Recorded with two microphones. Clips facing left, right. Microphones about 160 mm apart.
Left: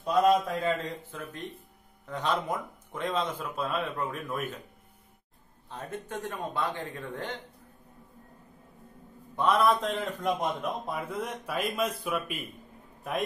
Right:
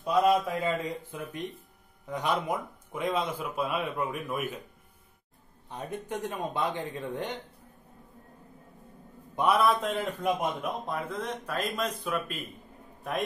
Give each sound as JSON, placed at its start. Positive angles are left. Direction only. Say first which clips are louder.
{"t": 0.0, "sound": "a man's voice", "louder": "left 1 dB", "side_deg": -10}
{"t": 5.7, "sound": "a man's voice", "louder": "right 2 dB", "side_deg": -15}
{"t": 9.3, "sound": "a man's voice", "louder": "right 1 dB", "side_deg": -15}
{"t": 9.6, "sound": "a man's voice", "louder": "even", "side_deg": 0}